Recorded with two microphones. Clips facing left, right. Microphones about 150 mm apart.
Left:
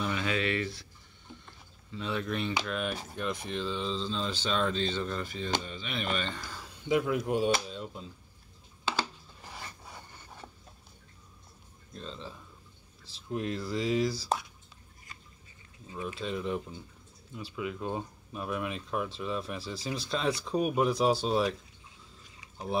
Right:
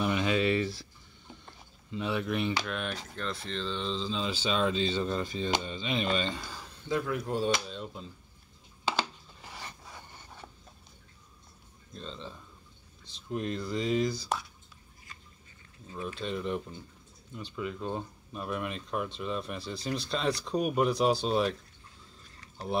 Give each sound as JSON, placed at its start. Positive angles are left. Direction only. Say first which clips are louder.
{"t": 0.0, "sound": "a sound", "louder": "right 4 dB", "side_deg": -20}
{"t": 2.0, "sound": "speech", "louder": "right 2 dB", "side_deg": -10}
{"t": 2.5, "sound": "speech", "louder": "left 1 dB", "side_deg": 5}
{"t": 5.1, "sound": "speech", "louder": "right 3 dB", "side_deg": -20}
{"t": 6.5, "sound": "a sound", "louder": "even", "side_deg": 5}
{"t": 6.9, "sound": "speech", "louder": "left 3 dB", "side_deg": 15}
{"t": 7.6, "sound": "speech", "louder": "even", "side_deg": 5}
{"t": 11.9, "sound": "speech", "louder": "even", "side_deg": 5}
{"t": 15.9, "sound": "speech", "louder": "even", "side_deg": 5}
{"t": 22.3, "sound": "a sound", "louder": "even", "side_deg": 5}